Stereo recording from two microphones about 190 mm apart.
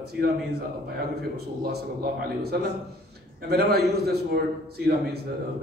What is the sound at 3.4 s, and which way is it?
A man's voice, 55° right (ahead or behind).